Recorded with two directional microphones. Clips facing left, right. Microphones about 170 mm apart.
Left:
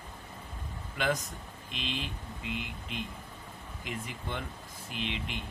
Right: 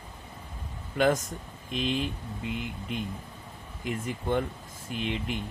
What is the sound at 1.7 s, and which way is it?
Speech, 45° right (ahead or behind).